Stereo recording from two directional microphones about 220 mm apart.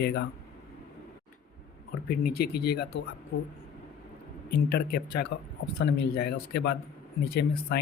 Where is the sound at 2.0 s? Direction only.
45° left (ahead or behind).